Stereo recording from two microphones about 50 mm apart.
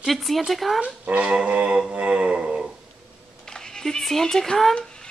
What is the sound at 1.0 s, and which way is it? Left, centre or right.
Music, right.